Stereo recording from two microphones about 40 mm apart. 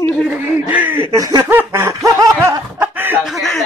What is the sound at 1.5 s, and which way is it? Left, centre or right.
Snicker, right.